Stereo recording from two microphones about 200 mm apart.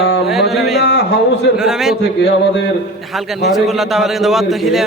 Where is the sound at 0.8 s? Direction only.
55° left (ahead or behind).